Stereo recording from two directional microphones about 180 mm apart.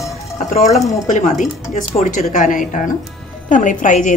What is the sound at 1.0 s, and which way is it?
A woman's voice, 45° left (ahead or behind).